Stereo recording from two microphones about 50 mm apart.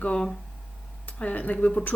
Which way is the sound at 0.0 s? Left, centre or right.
Left.